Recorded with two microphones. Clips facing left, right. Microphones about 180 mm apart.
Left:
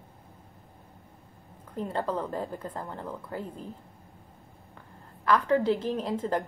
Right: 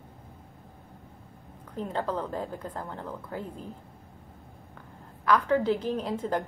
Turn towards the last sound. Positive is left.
turn(degrees=0)  # may be behind; listen again after turning